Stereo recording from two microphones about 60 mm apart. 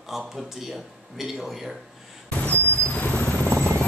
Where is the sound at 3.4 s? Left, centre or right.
Right.